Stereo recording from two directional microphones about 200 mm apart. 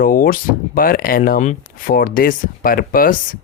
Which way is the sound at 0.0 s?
45° left (ahead or behind).